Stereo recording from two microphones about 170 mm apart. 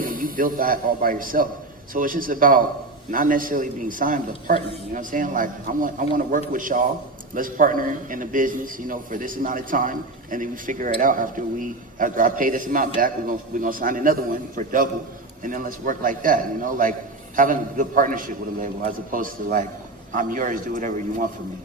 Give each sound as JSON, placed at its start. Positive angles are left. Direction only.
{"t": 0.0, "sound": "a man's voice", "side_deg": -55}